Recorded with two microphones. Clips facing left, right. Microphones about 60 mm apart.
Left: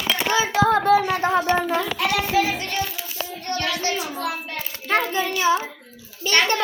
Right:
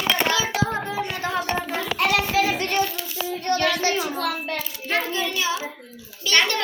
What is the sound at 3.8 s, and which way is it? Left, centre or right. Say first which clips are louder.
Child singing: right 2 dB; right.